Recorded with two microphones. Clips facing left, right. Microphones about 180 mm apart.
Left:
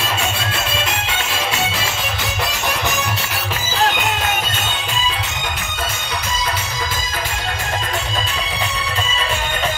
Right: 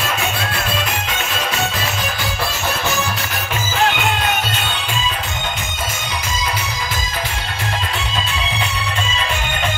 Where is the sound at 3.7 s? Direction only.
40° left (ahead or behind).